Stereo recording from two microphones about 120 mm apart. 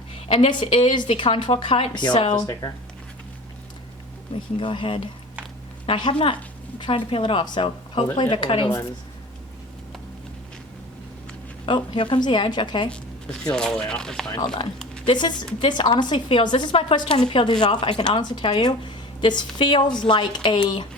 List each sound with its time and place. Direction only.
0.3 s a woman's voice: 50° left (ahead or behind)
2.5 s speech: 30° left (ahead or behind)
4.6 s a woman's voice: 45° left (ahead or behind)
11.6 s speech: 45° left (ahead or behind)
12.9 s zipper: 10° left (ahead or behind)
13.5 s speech: 5° left (ahead or behind)
14.3 s speech: 40° left (ahead or behind)
17.1 s a woman's voice: 60° left (ahead or behind)
17.4 s speech: 35° left (ahead or behind)